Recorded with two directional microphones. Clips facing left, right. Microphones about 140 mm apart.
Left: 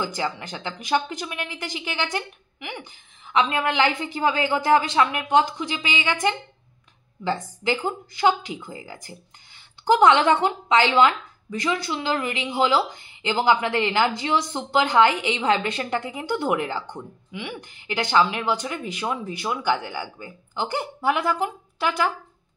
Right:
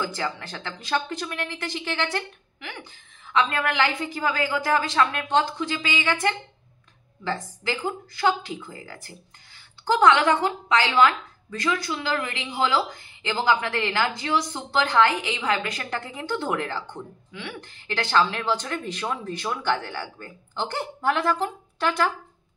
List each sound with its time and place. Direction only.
0.0 s a woman's voice: 15° left (ahead or behind)